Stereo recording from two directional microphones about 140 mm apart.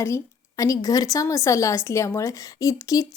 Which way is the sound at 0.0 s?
20° left (ahead or behind).